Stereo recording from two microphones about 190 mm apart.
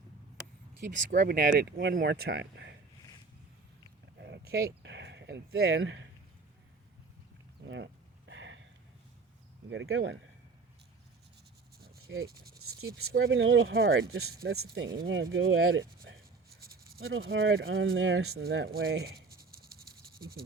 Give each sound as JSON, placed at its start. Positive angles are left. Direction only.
{"t": 0.9, "sound": "speech", "side_deg": -40}
{"t": 4.8, "sound": "speech", "side_deg": -70}
{"t": 7.6, "sound": "speech", "side_deg": -70}
{"t": 8.3, "sound": "a sound", "side_deg": -75}
{"t": 9.6, "sound": "speech", "side_deg": -85}
{"t": 12.1, "sound": "speech", "side_deg": -75}
{"t": 13.1, "sound": "speech", "side_deg": -90}
{"t": 16.1, "sound": "writing", "side_deg": -75}
{"t": 17.1, "sound": "speech", "side_deg": -90}